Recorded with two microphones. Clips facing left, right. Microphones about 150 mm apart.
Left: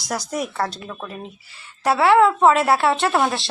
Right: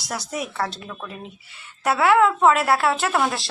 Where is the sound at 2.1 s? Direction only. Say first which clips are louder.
Left 3 dB; 30° left (ahead or behind).